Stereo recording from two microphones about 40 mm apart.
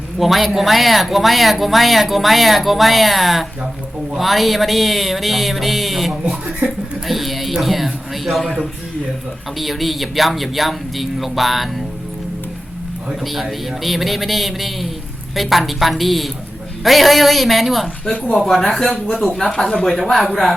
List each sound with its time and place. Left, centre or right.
0.2 s speech: centre
6.6 s speech: right
7.1 s speech: centre
9.6 s speech: centre
13.2 s speech: centre